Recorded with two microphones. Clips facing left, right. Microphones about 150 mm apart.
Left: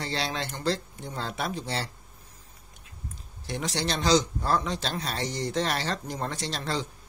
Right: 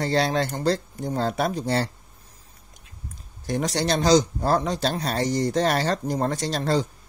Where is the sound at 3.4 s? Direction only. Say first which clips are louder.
Right 6 dB; 45° right (ahead or behind).